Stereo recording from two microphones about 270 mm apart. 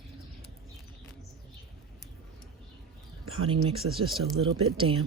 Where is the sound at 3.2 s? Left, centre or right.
Right.